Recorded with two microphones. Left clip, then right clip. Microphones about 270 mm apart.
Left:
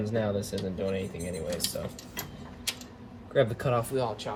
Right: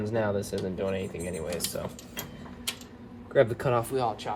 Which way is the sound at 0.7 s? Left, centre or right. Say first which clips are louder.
Even; right.